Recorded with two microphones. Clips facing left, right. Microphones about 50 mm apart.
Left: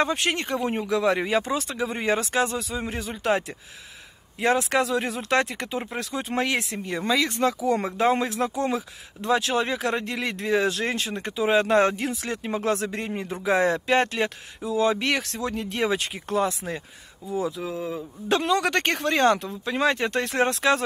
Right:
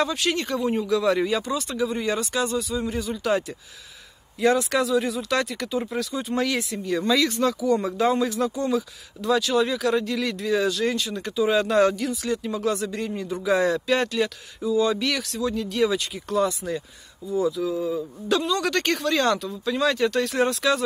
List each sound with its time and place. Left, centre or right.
0.0 s speech: left
7.0 s speech: centre
7.2 s speech: left